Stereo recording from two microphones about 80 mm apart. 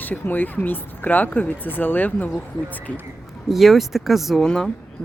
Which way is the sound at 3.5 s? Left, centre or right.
Centre.